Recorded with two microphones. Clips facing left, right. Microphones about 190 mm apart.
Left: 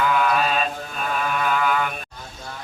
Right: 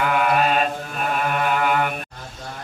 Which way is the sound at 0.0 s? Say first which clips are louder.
Right 1 dB; 60° right (ahead or behind).